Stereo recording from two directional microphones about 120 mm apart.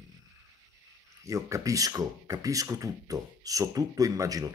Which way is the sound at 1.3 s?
25° right (ahead or behind).